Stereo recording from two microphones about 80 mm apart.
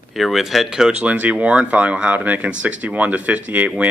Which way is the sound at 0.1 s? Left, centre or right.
Centre.